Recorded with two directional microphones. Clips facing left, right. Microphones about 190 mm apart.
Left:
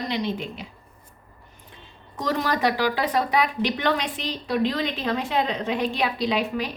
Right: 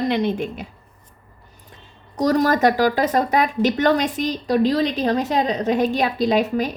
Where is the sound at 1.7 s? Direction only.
40° right (ahead or behind).